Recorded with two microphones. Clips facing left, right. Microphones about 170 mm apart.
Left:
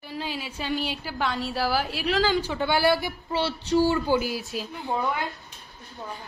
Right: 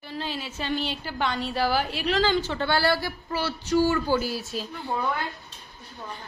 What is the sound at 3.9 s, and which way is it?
A woman's voice, 15° left (ahead or behind).